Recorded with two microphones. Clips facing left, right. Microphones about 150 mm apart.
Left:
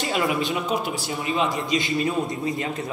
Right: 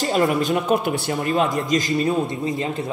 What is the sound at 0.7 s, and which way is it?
Speech, 50° right (ahead or behind).